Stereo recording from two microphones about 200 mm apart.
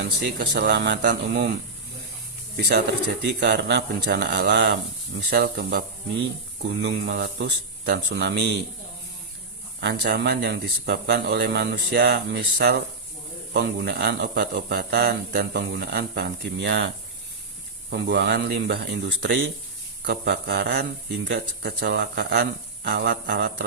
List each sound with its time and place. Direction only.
0.0 s speech: 55° right (ahead or behind)
2.6 s speech: 55° right (ahead or behind)
6.8 s speech: 55° right (ahead or behind)
9.8 s a man's voice: 55° right (ahead or behind)
17.9 s speech: 55° right (ahead or behind)